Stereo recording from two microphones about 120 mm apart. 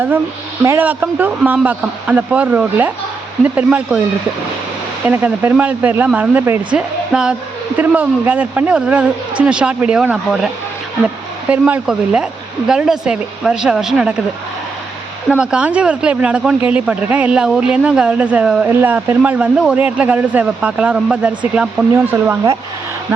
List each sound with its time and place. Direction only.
0.6 s speech: 20° right (ahead or behind)
5.0 s speech: 15° right (ahead or behind)
6.7 s a woman's voice: 5° right (ahead or behind)
15.4 s speech: 10° right (ahead or behind)
21.9 s speech: 20° right (ahead or behind)